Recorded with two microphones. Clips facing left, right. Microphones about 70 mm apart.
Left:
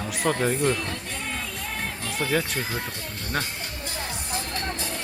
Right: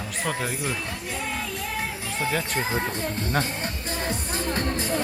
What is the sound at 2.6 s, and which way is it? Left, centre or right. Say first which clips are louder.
Speech: right 4 dB; right.